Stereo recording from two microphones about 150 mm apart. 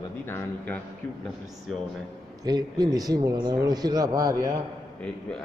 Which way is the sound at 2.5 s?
25° right (ahead or behind).